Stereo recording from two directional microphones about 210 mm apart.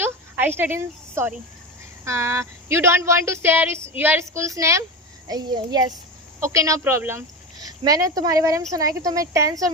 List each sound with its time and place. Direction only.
0.0 s a woman's voice: 10° right (ahead or behind)